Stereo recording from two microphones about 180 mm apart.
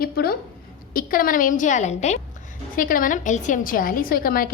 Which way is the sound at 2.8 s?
50° left (ahead or behind).